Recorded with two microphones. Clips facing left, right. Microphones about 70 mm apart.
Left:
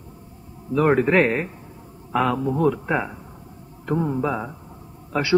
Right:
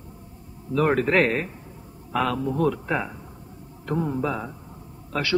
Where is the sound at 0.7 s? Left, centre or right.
Centre.